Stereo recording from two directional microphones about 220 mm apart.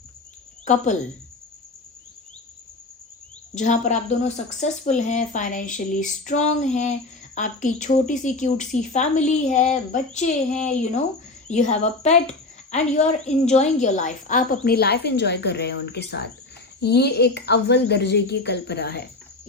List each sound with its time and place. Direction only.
0.6 s speech: 35° left (ahead or behind)
3.5 s a woman's voice: 35° left (ahead or behind)